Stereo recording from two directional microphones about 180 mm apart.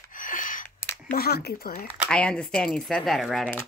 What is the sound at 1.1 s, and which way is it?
Speech, 60° left (ahead or behind).